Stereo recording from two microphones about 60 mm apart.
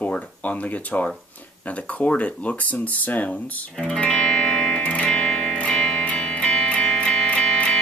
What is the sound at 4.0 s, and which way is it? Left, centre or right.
Music, centre.